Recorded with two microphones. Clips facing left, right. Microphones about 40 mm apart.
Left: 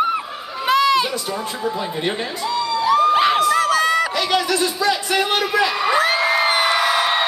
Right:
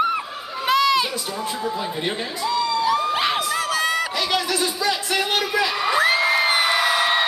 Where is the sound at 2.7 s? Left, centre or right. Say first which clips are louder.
Left 10 dB; centre.